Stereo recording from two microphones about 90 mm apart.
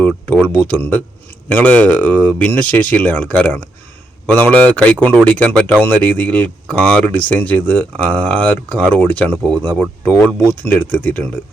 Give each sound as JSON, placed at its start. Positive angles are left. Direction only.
{"t": 0.4, "sound": "speech", "side_deg": 15}